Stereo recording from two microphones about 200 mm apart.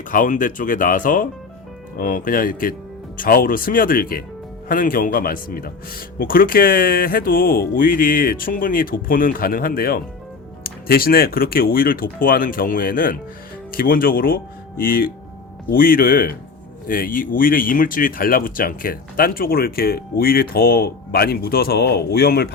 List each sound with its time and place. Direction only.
0.1 s speech: 40° left (ahead or behind)